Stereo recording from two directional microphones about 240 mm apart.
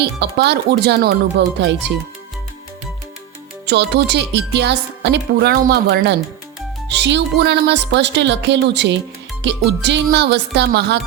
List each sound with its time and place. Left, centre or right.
0.0 s speech: right
3.7 s speech: right